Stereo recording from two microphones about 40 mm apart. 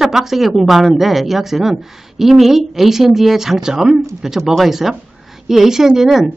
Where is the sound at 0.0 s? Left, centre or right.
Centre.